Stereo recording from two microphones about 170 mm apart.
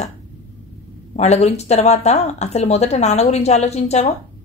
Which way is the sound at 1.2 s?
40° left (ahead or behind).